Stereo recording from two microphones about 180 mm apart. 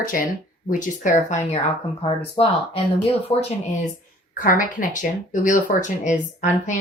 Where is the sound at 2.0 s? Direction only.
30° left (ahead or behind).